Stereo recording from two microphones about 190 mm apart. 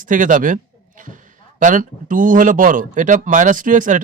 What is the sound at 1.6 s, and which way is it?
Speech, 40° right (ahead or behind).